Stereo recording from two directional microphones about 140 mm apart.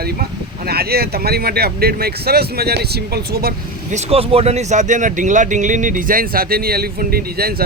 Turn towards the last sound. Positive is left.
turn(degrees=-90)